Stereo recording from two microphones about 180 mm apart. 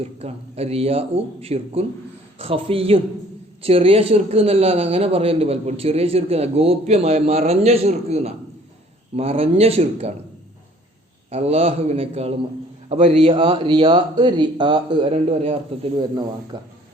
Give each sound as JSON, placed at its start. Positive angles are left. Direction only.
{"t": 0.0, "sound": "a man's voice", "side_deg": -35}
{"t": 11.3, "sound": "a man's voice", "side_deg": -35}